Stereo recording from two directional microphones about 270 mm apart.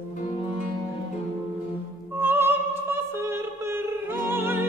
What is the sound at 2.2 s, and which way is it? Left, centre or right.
Music, centre.